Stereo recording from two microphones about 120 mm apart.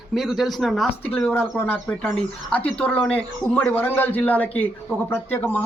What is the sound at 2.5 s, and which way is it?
A man's voice, 10° left (ahead or behind).